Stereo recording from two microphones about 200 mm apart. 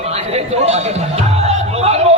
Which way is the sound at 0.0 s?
30° right (ahead or behind).